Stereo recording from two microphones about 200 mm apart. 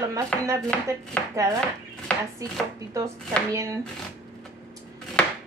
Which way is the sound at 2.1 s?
5° left (ahead or behind).